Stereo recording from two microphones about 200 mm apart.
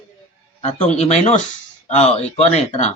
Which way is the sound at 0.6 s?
35° left (ahead or behind).